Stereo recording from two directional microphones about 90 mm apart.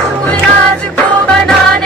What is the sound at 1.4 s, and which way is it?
Music, 5° left (ahead or behind).